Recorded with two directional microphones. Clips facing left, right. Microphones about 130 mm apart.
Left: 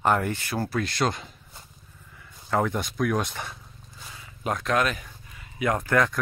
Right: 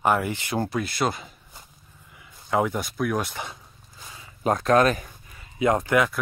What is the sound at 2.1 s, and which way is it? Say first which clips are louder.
Speech: right 2 dB; 15° right (ahead or behind).